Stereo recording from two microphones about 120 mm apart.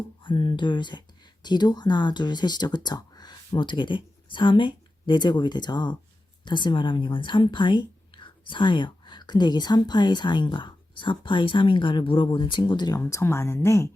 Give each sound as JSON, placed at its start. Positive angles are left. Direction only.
{"t": 0.2, "sound": "a woman's voice", "side_deg": 40}